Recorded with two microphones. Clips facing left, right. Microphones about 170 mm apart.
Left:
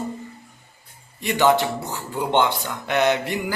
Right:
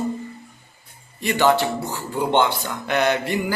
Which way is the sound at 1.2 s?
20° left (ahead or behind).